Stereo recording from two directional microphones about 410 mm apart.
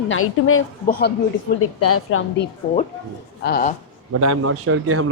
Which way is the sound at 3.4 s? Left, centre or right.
Centre.